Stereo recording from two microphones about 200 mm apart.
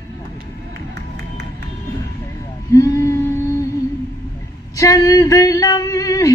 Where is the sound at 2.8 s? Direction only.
15° left (ahead or behind).